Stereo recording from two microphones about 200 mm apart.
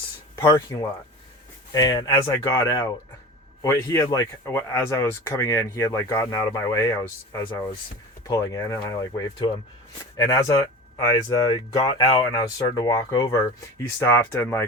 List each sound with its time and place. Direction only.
0.3 s speech: 15° left (ahead or behind)
8.3 s speech: 15° left (ahead or behind)